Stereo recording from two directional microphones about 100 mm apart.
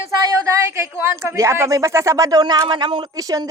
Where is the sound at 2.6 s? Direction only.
55° right (ahead or behind).